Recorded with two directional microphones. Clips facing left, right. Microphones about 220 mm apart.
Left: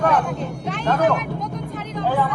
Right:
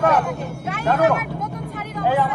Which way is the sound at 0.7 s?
10° right (ahead or behind).